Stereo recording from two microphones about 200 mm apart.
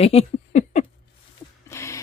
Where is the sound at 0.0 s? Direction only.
30° left (ahead or behind).